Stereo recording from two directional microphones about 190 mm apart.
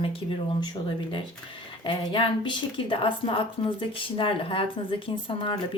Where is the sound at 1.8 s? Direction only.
25° left (ahead or behind).